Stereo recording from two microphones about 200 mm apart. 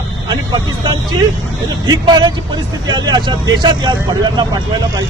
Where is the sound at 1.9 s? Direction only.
20° right (ahead or behind).